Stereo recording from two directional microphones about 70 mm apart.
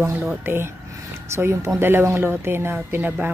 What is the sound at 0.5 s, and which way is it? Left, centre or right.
A woman's voice, right.